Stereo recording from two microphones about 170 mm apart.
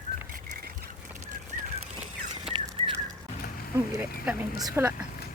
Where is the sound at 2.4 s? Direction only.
35° right (ahead or behind).